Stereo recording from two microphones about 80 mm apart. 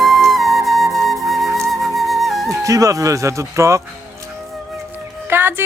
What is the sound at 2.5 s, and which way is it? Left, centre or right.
Speech, right.